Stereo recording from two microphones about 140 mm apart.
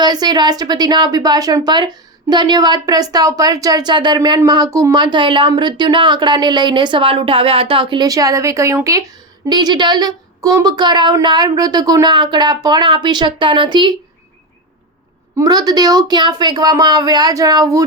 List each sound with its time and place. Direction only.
0.0 s speech: 30° right (ahead or behind)
15.4 s speech: 30° right (ahead or behind)